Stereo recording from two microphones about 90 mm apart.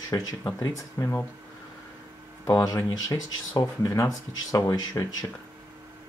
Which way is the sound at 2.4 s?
40° left (ahead or behind).